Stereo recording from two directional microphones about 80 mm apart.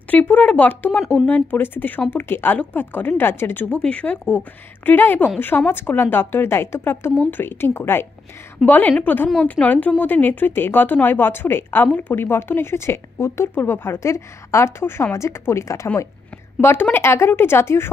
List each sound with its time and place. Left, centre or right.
0.1 s a woman's voice: centre
3.7 s a woman's voice: centre; by 15.9 s left
16.9 s a woman's voice: left